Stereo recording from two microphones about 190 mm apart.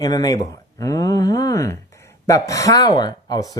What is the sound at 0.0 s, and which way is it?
Speech, 20° left (ahead or behind).